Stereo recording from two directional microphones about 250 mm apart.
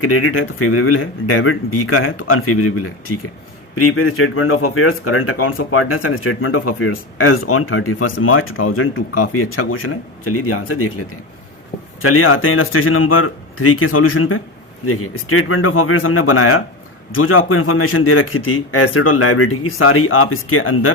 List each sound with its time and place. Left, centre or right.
0.0 s speech: left
12.0 s speech: left